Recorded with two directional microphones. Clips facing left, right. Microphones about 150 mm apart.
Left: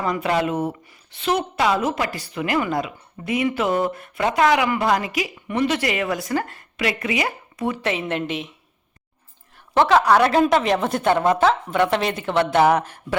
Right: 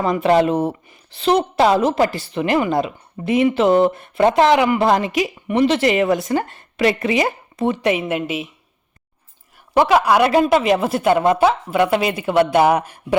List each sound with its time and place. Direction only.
0.0 s a woman's voice: 25° right (ahead or behind); by 8.4 s 5° right (ahead or behind)
9.7 s a woman's voice: 10° right (ahead or behind)